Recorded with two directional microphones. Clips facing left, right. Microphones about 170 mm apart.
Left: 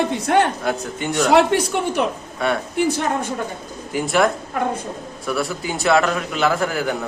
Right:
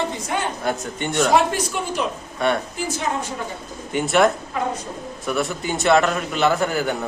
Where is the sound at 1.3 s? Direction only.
65° left (ahead or behind).